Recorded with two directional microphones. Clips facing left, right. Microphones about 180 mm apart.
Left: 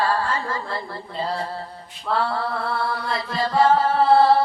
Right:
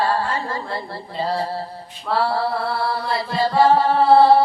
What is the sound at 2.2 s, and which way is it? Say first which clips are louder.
Chant: right 6 dB; 30° right (ahead or behind).